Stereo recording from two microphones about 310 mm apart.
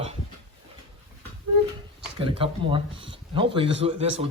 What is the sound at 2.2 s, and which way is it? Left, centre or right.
A man's voice, centre.